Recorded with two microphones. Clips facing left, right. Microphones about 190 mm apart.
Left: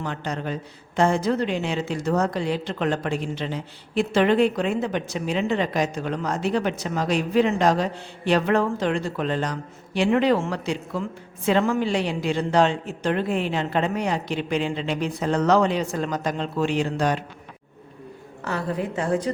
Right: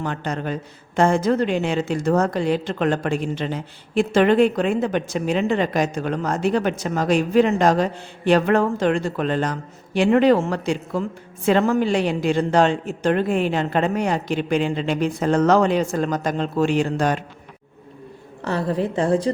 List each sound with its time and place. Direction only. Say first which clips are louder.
0.0 s a woman's voice: right 3 dB; 50° right (ahead or behind)
18.4 s a woman's voice: right 4 dB; 35° right (ahead or behind)